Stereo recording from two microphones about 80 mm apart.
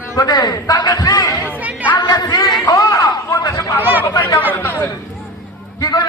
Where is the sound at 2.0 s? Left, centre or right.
Left.